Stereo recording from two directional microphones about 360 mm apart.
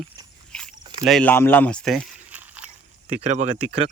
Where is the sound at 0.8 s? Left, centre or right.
Centre.